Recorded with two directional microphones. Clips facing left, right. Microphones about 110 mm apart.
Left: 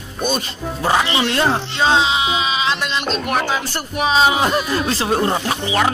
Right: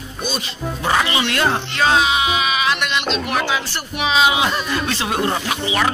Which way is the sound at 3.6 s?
45° left (ahead or behind).